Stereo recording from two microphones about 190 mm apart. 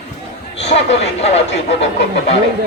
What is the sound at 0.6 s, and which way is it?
Speech, 35° left (ahead or behind).